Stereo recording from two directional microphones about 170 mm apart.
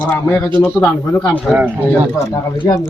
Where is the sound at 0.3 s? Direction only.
10° left (ahead or behind).